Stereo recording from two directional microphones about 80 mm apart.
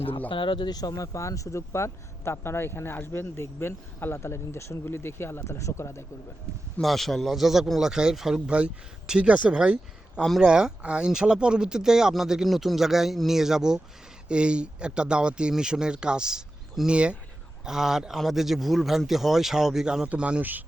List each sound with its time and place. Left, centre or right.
0.3 s speech: left
0.7 s speech: left
6.8 s a man's voice: centre
10.2 s speech: centre
10.5 s a man's voice: centre